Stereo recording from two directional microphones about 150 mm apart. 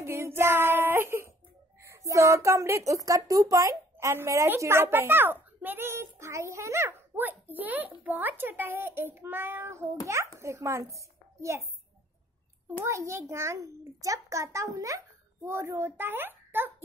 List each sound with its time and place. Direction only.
0.0 s child singing: 15° right (ahead or behind)
1.8 s a woman's voice: 20° right (ahead or behind)
12.8 s a woman's voice: 20° right (ahead or behind)